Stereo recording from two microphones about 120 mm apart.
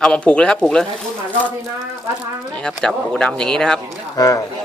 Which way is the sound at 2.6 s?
5° left (ahead or behind).